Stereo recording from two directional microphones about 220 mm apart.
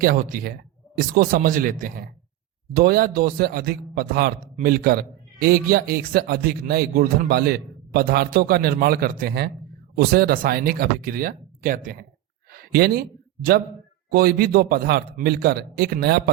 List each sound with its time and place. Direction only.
0.0 s a man's voice: 40° right (ahead or behind)
12.5 s a sound: 45° right (ahead or behind)
14.1 s a man's voice: 45° right (ahead or behind)